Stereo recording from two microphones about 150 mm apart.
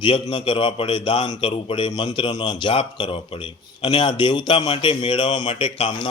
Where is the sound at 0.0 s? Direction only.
35° left (ahead or behind).